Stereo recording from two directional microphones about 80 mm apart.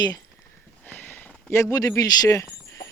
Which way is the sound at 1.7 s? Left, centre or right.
Left.